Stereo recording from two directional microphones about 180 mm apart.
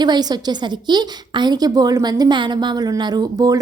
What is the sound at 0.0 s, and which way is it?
A woman's voice, 25° right (ahead or behind).